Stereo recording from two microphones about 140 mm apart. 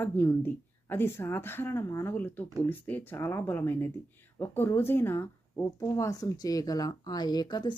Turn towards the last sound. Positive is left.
turn(degrees=30)  # may be behind; listen again after turning